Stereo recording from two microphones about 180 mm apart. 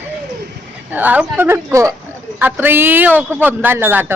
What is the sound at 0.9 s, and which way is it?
Speech, 10° right (ahead or behind).